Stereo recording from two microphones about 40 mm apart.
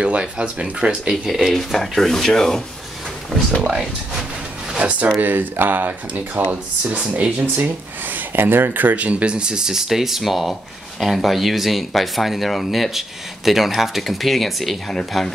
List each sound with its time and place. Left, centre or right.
0.0 s speech: right
1.5 s speech: centre
4.7 s speech: right
5.2 s speech: right
7.5 s speech: right
8.9 s speech: right; by 15.3 s centre